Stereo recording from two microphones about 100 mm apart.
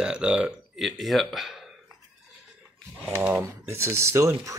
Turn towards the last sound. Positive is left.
turn(degrees=-30)  # may be behind; listen again after turning